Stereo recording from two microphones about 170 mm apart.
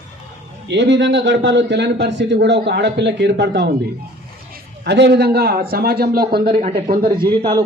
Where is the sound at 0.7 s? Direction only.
90° right.